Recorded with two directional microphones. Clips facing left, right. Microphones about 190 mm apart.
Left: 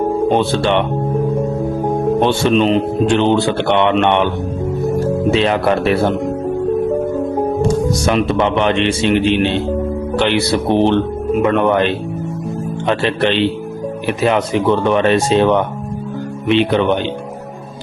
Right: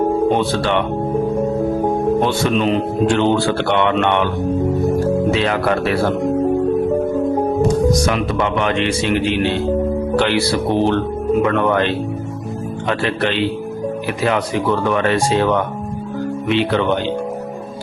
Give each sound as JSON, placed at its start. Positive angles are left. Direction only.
{"t": 0.3, "sound": "speech", "side_deg": 25}
{"t": 2.2, "sound": "speech", "side_deg": 25}
{"t": 5.3, "sound": "speech", "side_deg": 25}
{"t": 7.6, "sound": "speech", "side_deg": 25}